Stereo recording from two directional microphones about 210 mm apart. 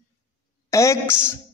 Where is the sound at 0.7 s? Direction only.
15° left (ahead or behind).